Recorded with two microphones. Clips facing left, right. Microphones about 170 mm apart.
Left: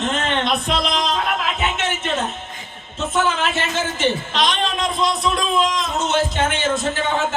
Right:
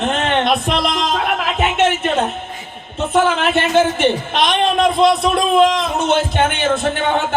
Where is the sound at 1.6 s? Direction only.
60° right (ahead or behind).